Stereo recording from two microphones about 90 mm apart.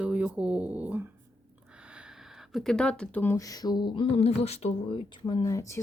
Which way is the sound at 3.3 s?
40° left (ahead or behind).